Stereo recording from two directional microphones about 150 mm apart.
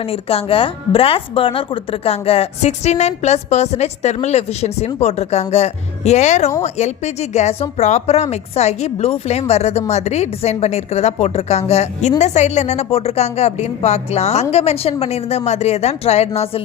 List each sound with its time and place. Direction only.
0.0 s speech: 40° left (ahead or behind)